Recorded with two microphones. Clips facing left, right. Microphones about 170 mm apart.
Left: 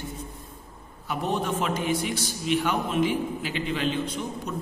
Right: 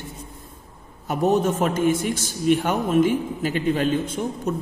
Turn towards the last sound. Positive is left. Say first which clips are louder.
# right 5 dB
turn(degrees=-45)  # may be behind; listen again after turning